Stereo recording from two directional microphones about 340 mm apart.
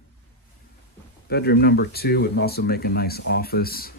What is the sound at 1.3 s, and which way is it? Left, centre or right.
Speech, left.